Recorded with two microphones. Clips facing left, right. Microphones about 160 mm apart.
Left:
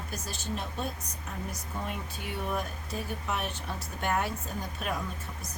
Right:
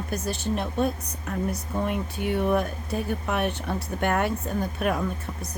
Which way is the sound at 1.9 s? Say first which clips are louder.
Right 10 dB; 60° right (ahead or behind).